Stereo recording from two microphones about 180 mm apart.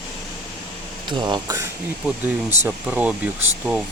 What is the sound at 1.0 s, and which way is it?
Speech, 25° right (ahead or behind).